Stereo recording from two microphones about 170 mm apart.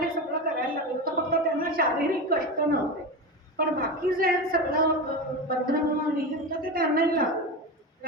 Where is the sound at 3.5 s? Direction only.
60° right (ahead or behind).